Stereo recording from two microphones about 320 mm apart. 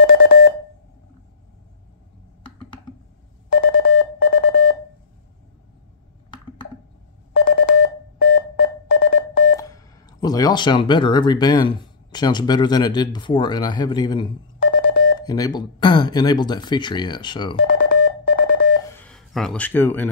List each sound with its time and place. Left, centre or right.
0.0 s a sound: left
3.6 s telephone dialing: left
7.3 s telephone dialing: left
9.6 s speech: centre
14.6 s telephone dialing: left
15.1 s speech: centre
17.6 s telephone dialing: left
18.9 s speech: centre